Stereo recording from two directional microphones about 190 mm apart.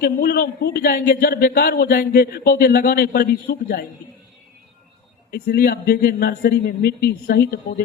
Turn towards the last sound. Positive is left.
turn(degrees=50)  # may be behind; listen again after turning